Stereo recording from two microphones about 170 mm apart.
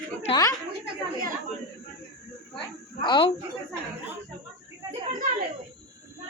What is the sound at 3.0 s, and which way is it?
Speech, 25° left (ahead or behind).